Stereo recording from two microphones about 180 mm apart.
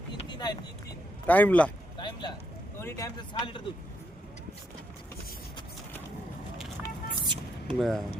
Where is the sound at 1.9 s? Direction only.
25° left (ahead or behind).